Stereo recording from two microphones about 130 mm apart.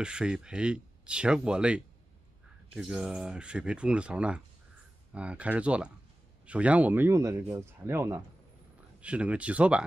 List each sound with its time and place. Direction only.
0.0 s speech: 5° right (ahead or behind)
9.0 s speech: 10° right (ahead or behind)